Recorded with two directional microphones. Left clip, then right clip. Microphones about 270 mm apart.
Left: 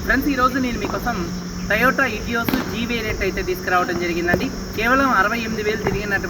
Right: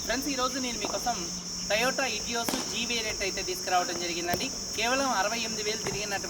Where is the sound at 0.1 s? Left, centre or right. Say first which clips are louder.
Left 12 dB; right.